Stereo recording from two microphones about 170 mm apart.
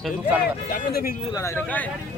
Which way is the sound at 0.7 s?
60° left (ahead or behind).